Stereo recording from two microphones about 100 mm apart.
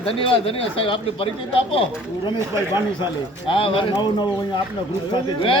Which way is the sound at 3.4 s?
65° left (ahead or behind).